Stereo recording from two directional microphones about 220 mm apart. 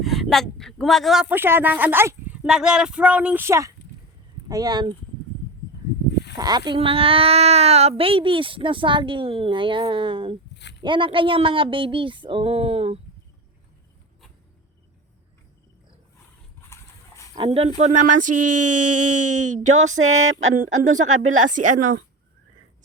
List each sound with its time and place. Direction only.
0.0 s speech: centre (ahead or behind); by 4.9 s 20° right (ahead or behind)
6.3 s speech: 20° right (ahead or behind)
10.5 s a sound: 50° left (ahead or behind)
10.8 s speech: 20° right (ahead or behind)
17.3 s a woman's voice: 25° right (ahead or behind)
18.1 s speech: 90° right
19.6 s a woman's voice: 35° right (ahead or behind)
20.0 s a sound: 70° right (ahead or behind)
20.7 s a woman's voice: 35° right (ahead or behind)